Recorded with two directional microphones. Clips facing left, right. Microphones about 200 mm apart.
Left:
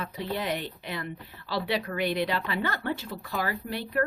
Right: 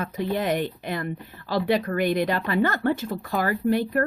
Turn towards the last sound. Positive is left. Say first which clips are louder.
# right 7 dB
turn(degrees=-50)  # may be behind; listen again after turning